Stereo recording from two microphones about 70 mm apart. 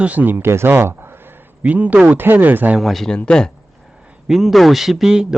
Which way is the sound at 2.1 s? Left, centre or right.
Right.